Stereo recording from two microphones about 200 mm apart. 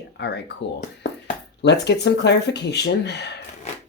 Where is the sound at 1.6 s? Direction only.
60° left (ahead or behind).